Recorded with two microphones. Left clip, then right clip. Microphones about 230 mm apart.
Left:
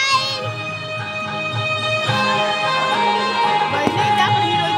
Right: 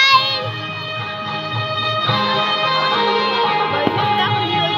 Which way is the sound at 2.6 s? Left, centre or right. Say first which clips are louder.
Right 1 dB; left.